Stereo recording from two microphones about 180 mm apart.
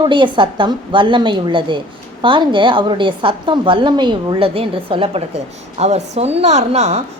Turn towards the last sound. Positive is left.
turn(degrees=-35)  # may be behind; listen again after turning